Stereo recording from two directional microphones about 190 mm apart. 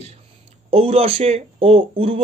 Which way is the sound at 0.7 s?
30° right (ahead or behind).